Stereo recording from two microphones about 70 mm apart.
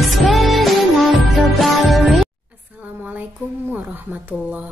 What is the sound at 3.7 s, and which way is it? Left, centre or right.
Speech, right.